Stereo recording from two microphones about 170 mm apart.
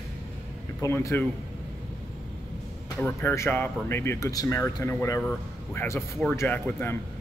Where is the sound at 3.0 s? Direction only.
15° left (ahead or behind).